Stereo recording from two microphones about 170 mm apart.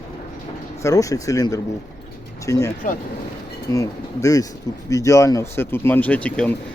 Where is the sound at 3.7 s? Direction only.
20° left (ahead or behind).